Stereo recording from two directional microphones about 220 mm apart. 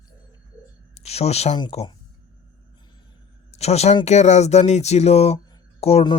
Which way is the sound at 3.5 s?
30° left (ahead or behind).